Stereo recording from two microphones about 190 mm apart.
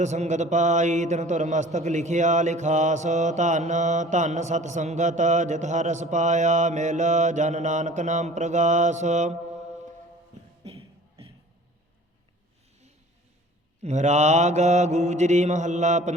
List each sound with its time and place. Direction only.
0.0 s a man's voice: 40° right (ahead or behind)
13.8 s a man's voice: 40° right (ahead or behind)